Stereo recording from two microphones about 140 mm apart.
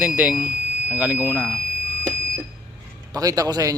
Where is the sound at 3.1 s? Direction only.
25° right (ahead or behind).